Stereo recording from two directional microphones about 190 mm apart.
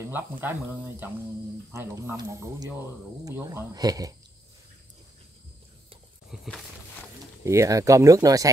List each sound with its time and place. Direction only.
0.1 s speech: 10° right (ahead or behind)
6.3 s a sound: centre (ahead or behind)
7.4 s speech: 15° right (ahead or behind)